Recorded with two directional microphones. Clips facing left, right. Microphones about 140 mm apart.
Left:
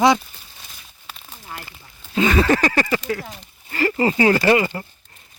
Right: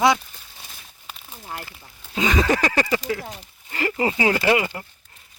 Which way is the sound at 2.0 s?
10° right (ahead or behind).